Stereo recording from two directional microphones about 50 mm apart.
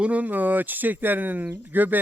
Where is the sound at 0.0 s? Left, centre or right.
Right.